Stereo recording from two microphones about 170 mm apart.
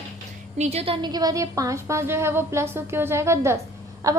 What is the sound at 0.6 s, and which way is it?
A woman's voice, 35° right (ahead or behind).